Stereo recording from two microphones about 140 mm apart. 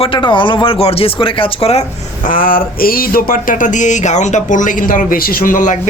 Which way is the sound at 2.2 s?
85° left.